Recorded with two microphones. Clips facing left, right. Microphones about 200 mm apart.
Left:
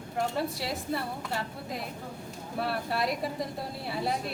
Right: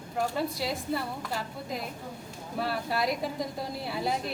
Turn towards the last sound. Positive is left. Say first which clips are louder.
# right 1 dB
turn(degrees=0)  # may be behind; listen again after turning